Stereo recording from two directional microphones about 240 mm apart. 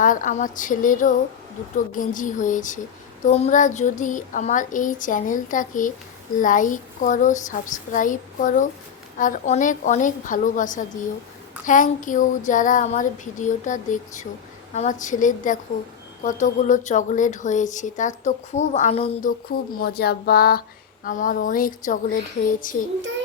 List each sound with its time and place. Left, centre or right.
0.0 s a woman's voice: left